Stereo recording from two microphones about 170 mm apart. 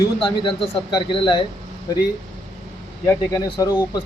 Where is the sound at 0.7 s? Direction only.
30° left (ahead or behind).